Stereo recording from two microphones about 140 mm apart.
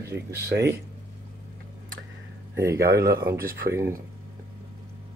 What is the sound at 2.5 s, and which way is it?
Speech, 20° right (ahead or behind).